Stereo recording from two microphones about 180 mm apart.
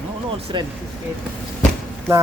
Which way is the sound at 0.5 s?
25° right (ahead or behind).